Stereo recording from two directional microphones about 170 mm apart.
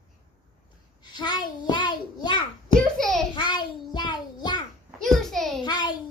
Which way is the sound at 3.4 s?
25° left (ahead or behind).